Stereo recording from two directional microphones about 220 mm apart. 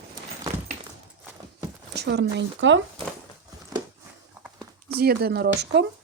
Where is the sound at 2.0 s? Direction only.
50° right (ahead or behind).